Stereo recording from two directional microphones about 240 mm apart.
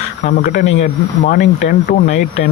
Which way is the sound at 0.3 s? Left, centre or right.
Left.